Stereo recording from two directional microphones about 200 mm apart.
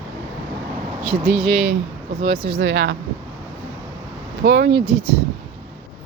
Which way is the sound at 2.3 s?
25° right (ahead or behind).